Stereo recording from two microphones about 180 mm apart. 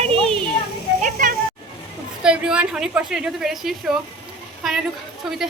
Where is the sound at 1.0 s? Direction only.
50° right (ahead or behind).